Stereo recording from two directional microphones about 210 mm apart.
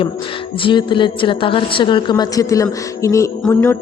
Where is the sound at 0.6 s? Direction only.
20° left (ahead or behind).